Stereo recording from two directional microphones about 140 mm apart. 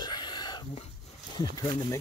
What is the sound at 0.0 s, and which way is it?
Whispering, 30° left (ahead or behind).